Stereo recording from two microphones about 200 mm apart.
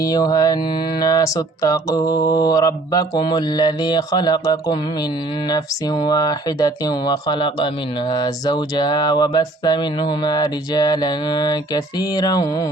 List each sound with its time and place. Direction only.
0.0 s speech: 20° left (ahead or behind)